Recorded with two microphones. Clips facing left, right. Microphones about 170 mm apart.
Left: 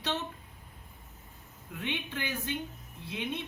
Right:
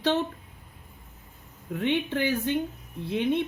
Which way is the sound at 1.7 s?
55° right (ahead or behind).